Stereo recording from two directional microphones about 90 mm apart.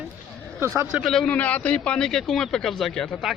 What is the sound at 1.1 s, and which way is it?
Speech, 5° left (ahead or behind).